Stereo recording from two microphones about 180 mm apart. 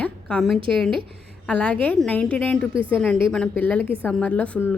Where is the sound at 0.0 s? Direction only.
5° left (ahead or behind).